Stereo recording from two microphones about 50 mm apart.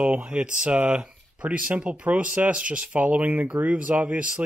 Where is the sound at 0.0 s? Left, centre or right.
Right.